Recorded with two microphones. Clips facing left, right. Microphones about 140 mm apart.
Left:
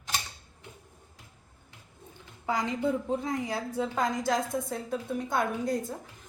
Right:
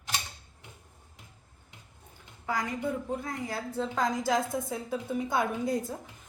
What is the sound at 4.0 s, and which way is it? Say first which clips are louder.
A woman's voice: right 1 dB; centre (ahead or behind).